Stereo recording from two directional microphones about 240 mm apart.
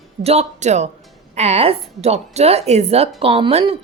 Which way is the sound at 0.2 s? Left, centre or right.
Right.